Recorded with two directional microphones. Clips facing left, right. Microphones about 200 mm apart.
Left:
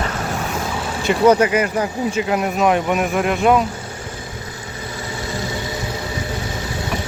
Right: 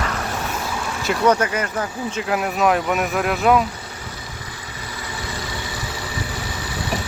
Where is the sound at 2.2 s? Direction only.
Centre (ahead or behind).